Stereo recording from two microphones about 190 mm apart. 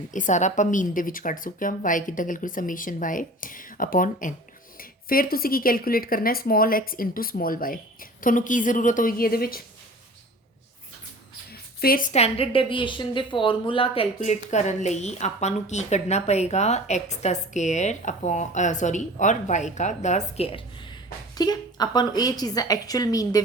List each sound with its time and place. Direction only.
0.1 s a woman's voice: 40° left (ahead or behind)
11.8 s a woman's voice: 50° left (ahead or behind); by 23.4 s 20° left (ahead or behind)